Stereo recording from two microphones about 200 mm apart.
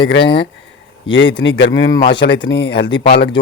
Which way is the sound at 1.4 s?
60° left (ahead or behind).